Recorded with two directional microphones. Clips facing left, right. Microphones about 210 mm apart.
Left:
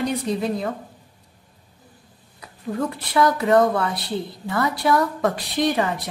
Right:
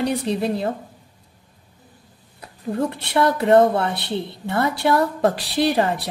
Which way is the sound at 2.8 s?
30° right (ahead or behind).